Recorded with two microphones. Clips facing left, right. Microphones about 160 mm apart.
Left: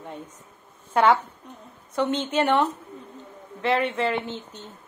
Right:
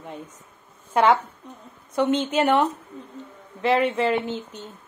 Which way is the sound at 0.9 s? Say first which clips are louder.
Right 1 dB; 10° right (ahead or behind).